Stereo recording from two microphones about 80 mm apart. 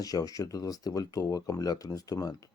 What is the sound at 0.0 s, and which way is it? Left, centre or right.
Speech, left.